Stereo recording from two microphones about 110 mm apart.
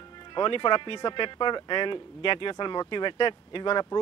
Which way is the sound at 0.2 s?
45° left (ahead or behind).